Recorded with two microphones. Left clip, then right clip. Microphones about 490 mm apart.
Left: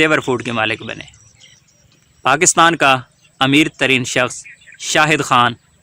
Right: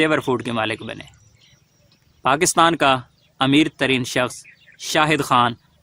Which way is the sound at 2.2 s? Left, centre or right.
Right.